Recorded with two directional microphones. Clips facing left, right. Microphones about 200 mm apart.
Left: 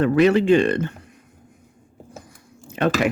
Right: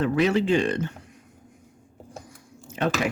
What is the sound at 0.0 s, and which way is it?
Speech, 60° left (ahead or behind).